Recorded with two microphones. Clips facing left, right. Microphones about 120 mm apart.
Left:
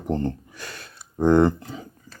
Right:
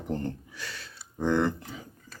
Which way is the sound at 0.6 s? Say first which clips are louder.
Left 2 dB; 50° left (ahead or behind).